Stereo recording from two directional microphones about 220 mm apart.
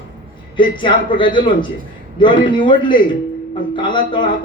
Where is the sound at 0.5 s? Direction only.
20° left (ahead or behind).